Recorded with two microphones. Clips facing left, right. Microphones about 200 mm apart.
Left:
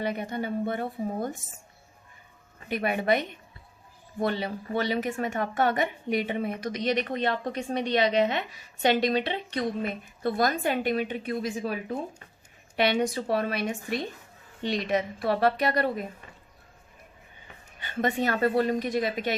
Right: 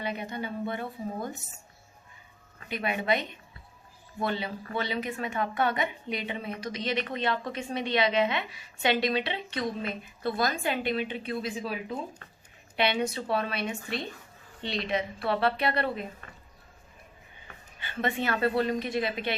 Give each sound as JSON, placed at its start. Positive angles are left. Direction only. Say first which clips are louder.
{"t": 0.0, "sound": "speech", "louder": "left 4 dB", "side_deg": 50}
{"t": 2.6, "sound": "speech", "louder": "left 3 dB", "side_deg": 50}
{"t": 17.8, "sound": "speech", "louder": "left 3 dB", "side_deg": 45}